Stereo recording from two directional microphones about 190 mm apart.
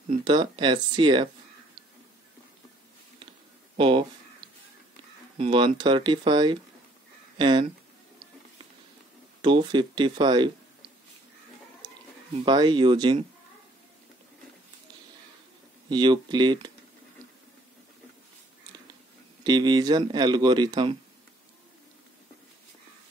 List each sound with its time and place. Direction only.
0.2 s speech: 25° right (ahead or behind)
3.7 s speech: 25° right (ahead or behind)
5.4 s speech: 25° right (ahead or behind)
9.4 s speech: 25° right (ahead or behind)
12.4 s speech: 25° right (ahead or behind)
15.9 s speech: 25° right (ahead or behind)
19.4 s speech: 25° right (ahead or behind)